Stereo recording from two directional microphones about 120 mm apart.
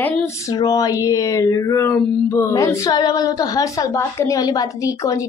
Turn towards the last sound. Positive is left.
turn(degrees=30)  # may be behind; listen again after turning